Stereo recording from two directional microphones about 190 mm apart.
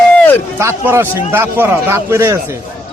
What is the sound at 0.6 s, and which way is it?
A man's voice, 15° right (ahead or behind).